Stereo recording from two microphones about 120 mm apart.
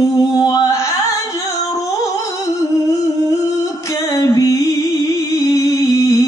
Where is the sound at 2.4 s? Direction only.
25° left (ahead or behind).